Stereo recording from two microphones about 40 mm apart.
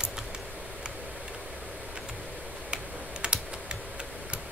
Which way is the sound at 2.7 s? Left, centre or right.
Right.